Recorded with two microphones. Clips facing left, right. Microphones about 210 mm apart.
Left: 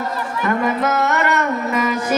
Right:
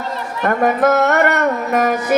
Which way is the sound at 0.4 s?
50° right (ahead or behind).